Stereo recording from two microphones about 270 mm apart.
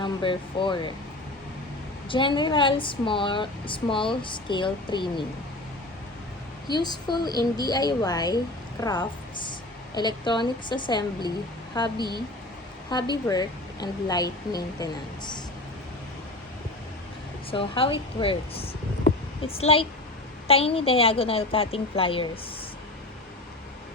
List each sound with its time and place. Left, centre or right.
0.0 s speech: centre
2.0 s speech: centre
6.7 s speech: centre
11.9 s a woman's voice: centre
12.9 s speech: centre
17.5 s a woman's voice: centre